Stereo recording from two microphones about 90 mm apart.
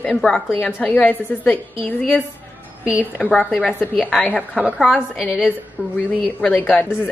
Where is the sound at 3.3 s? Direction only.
15° left (ahead or behind).